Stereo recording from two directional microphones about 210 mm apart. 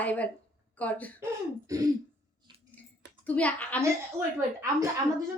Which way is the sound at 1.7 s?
15° right (ahead or behind).